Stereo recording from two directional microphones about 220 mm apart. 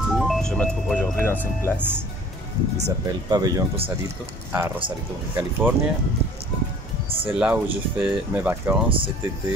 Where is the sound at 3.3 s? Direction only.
15° right (ahead or behind).